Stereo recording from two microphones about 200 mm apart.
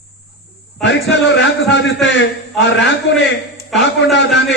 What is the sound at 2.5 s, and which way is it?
Speech, 60° left (ahead or behind).